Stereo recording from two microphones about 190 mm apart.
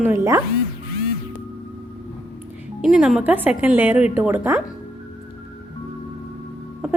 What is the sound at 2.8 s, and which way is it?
A woman's voice, centre (ahead or behind).